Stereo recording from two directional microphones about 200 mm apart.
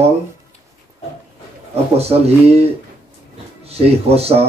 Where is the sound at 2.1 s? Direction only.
30° right (ahead or behind).